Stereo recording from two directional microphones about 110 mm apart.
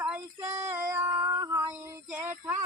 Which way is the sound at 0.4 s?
25° right (ahead or behind).